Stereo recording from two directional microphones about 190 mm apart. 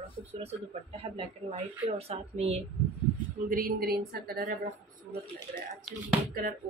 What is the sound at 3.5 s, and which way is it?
A woman's voice, 50° right (ahead or behind).